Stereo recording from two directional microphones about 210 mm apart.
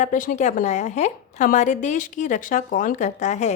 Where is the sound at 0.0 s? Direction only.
40° left (ahead or behind).